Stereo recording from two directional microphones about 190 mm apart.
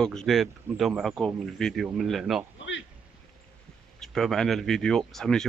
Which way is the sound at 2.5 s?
75° left (ahead or behind).